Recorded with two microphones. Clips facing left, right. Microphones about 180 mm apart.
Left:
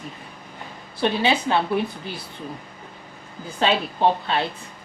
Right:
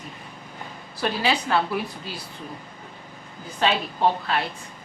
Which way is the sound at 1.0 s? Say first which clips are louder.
Left 3 dB; 25° left (ahead or behind).